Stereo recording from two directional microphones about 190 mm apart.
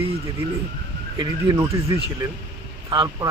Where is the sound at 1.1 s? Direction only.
25° right (ahead or behind).